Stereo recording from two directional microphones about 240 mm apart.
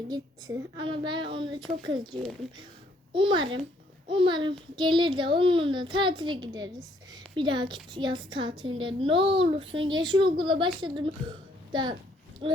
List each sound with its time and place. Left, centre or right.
0.1 s a woman's voice: centre
2.1 s speech: centre
3.1 s a woman's voice: right